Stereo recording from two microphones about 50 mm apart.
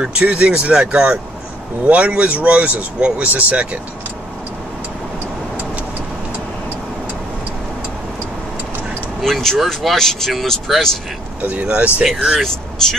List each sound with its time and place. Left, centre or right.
0.0 s speech: right
1.9 s speech: right
9.2 s speech: centre
11.4 s speech: right
12.4 s speech: centre